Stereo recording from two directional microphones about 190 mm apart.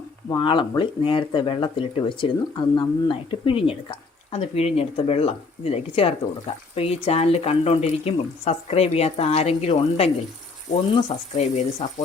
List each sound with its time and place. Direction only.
0.3 s speech: 25° left (ahead or behind)